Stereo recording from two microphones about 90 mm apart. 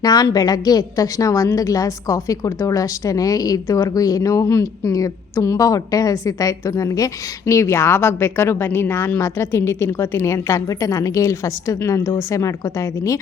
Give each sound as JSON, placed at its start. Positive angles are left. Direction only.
{"t": 0.0, "sound": "a woman's voice", "side_deg": 50}